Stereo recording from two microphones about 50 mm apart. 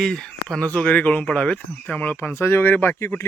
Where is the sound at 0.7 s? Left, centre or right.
Left.